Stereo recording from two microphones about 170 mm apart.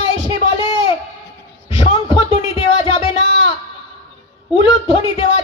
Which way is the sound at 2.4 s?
35° left (ahead or behind).